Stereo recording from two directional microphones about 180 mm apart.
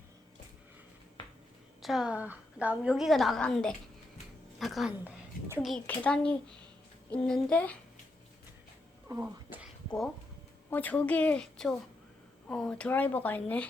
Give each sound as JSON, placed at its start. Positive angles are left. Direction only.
{"t": 1.8, "sound": "a woman's voice", "side_deg": 0}
{"t": 9.0, "sound": "a sound", "side_deg": -10}
{"t": 10.7, "sound": "speech", "side_deg": 10}